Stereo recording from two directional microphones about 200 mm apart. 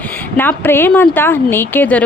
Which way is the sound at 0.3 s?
10° left (ahead or behind).